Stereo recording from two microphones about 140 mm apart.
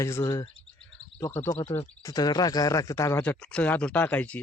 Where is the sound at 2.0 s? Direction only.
25° left (ahead or behind).